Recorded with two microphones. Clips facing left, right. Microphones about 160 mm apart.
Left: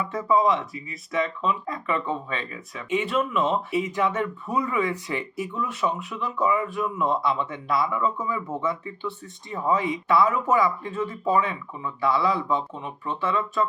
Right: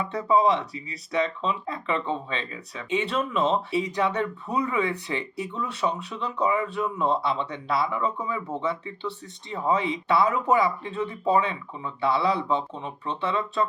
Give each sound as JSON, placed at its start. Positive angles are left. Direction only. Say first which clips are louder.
{"t": 0.0, "sound": "speech", "louder": "even", "side_deg": -30}